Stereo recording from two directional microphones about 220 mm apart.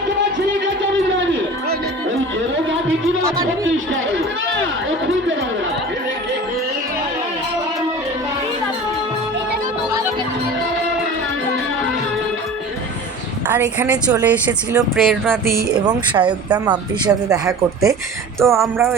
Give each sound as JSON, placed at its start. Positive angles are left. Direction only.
{"t": 13.5, "sound": "a woman's voice", "side_deg": -10}
{"t": 14.9, "sound": "a sound", "side_deg": 0}
{"t": 15.8, "sound": "speech", "side_deg": -20}